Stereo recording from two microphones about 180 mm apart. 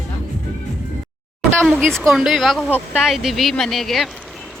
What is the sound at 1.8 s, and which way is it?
Speech, 5° left (ahead or behind).